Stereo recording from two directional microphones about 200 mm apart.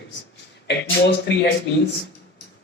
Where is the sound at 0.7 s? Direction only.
55° left (ahead or behind).